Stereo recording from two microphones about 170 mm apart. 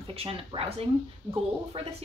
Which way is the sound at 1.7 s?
35° right (ahead or behind).